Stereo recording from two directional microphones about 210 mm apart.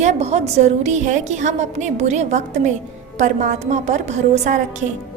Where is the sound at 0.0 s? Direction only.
30° right (ahead or behind).